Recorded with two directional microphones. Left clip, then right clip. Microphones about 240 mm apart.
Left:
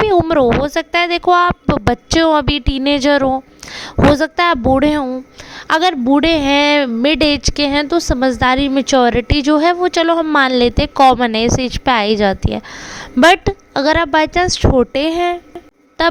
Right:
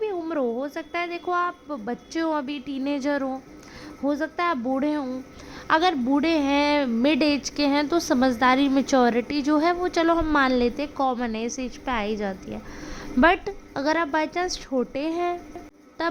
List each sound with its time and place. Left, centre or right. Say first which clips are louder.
0.1 s a woman's voice: left 15 dB; left